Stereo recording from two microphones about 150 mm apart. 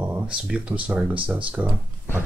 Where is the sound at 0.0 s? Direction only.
10° right (ahead or behind).